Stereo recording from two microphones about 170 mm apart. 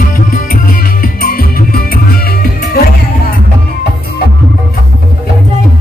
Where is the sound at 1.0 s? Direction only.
60° left (ahead or behind).